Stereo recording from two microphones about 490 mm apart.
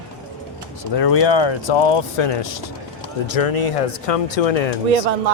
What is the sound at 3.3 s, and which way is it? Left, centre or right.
Speech, left.